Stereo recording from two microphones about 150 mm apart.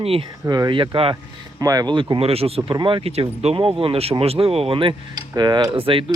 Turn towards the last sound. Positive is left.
turn(degrees=-35)  # may be behind; listen again after turning